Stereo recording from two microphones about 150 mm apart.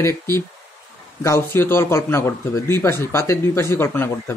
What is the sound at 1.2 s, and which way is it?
A man's voice, 15° left (ahead or behind).